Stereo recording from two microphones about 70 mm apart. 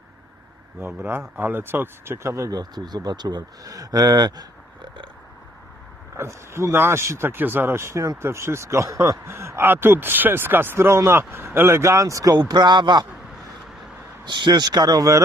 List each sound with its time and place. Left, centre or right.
0.8 s speech: right
2.5 s speech: right
6.1 s speech: right
14.3 s speech: right